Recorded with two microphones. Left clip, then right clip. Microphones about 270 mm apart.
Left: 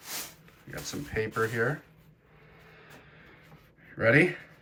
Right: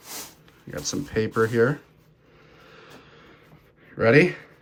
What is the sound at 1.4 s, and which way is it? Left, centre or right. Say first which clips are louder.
Speech: right 8 dB; left.